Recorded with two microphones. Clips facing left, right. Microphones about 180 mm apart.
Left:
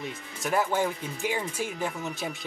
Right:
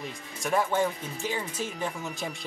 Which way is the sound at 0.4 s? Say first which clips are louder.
Even; 5° left (ahead or behind).